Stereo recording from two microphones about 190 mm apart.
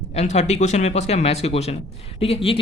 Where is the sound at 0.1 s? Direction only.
35° left (ahead or behind).